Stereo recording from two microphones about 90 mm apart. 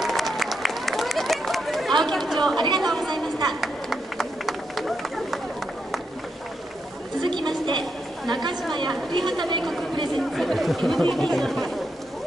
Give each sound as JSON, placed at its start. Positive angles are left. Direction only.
{"t": 0.0, "sound": "run", "side_deg": 0}
{"t": 2.0, "sound": "chatter", "side_deg": 0}
{"t": 2.5, "sound": "speech", "side_deg": -55}
{"t": 2.8, "sound": "speech", "side_deg": 0}
{"t": 3.6, "sound": "run", "side_deg": 0}
{"t": 7.2, "sound": "a sound", "side_deg": -60}
{"t": 8.3, "sound": "speech", "side_deg": -55}
{"t": 10.1, "sound": "speech", "side_deg": 0}